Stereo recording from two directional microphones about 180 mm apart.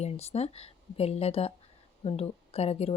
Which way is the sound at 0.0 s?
35° left (ahead or behind).